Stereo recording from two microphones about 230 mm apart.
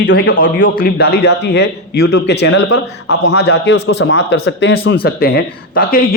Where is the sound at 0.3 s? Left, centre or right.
Left.